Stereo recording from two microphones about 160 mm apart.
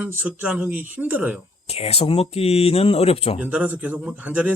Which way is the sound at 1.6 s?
40° left (ahead or behind).